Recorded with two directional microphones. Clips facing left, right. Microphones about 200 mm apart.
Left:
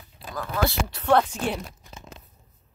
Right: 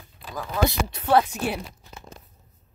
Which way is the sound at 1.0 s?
5° right (ahead or behind).